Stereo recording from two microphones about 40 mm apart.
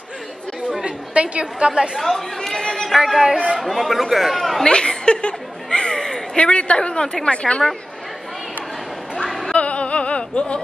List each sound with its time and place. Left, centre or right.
0.8 s a woman's voice: right
2.0 s chatter: centre
3.0 s speech: centre
3.6 s speech: centre
4.6 s a sound: left
6.3 s a woman's voice: left
9.2 s a sound: centre
9.5 s opera: left